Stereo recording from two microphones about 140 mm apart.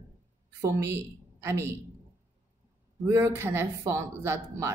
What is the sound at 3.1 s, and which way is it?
Speech, 20° right (ahead or behind).